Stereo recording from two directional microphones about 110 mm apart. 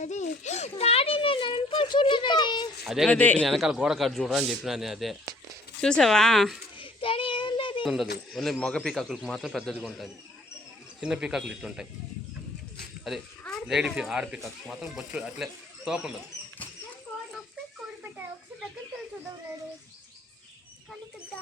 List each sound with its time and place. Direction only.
0.0 s children playing: 90° left; by 2.7 s 45° left (ahead or behind)
2.8 s speech: centre (ahead or behind)
3.1 s speech: 15° left (ahead or behind)
3.4 s speech: centre (ahead or behind)
6.7 s child singing: 55° left (ahead or behind)
7.9 s speech: centre (ahead or behind)
11.0 s speech: 5° right (ahead or behind)
13.7 s speech: 5° right (ahead or behind)